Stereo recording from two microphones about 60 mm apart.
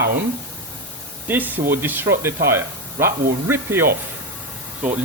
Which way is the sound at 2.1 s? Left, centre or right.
Right.